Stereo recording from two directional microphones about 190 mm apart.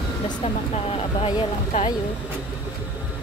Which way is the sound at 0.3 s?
30° left (ahead or behind).